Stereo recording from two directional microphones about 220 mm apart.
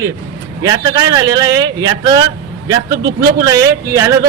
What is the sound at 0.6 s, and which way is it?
A man's voice, 15° right (ahead or behind).